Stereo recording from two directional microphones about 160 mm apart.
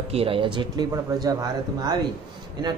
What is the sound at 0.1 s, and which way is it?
Speech, 35° right (ahead or behind).